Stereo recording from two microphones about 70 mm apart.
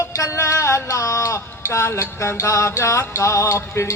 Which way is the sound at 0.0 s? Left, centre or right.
Left.